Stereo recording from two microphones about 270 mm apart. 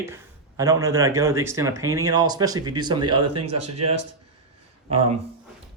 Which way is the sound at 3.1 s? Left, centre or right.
Right.